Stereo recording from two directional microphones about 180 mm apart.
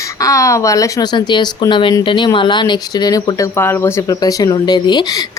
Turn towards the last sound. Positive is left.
turn(degrees=25)  # may be behind; listen again after turning